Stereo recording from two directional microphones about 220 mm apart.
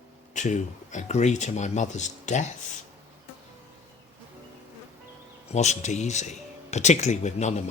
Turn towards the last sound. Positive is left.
turn(degrees=30)  # may be behind; listen again after turning